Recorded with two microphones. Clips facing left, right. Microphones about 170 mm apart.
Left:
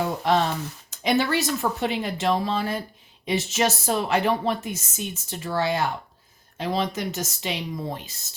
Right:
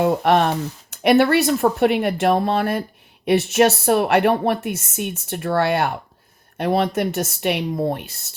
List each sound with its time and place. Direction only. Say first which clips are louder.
0.0 s speech: right 6 dB; 60° right (ahead or behind)